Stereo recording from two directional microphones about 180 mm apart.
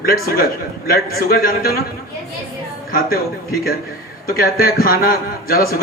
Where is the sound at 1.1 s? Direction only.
55° left (ahead or behind).